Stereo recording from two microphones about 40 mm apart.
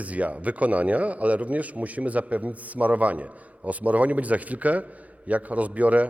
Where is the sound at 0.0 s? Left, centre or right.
Right.